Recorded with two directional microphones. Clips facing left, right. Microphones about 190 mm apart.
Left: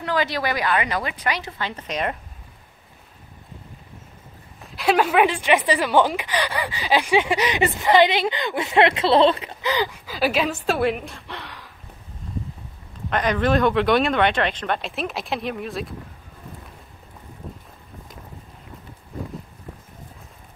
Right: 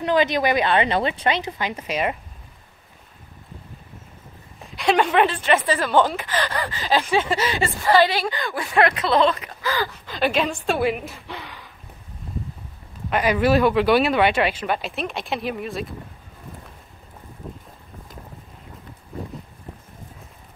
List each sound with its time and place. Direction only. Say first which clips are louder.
0.0 s speech: right 4 dB; 20° right (ahead or behind)
4.7 s a woman's voice: even; 5° left (ahead or behind); by 9.8 s 20° left (ahead or behind)
10.0 s speech: right 2 dB; 5° left (ahead or behind)
13.1 s speech: right 2 dB; 10° right (ahead or behind)